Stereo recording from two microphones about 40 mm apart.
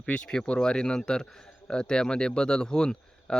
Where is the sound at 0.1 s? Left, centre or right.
Left.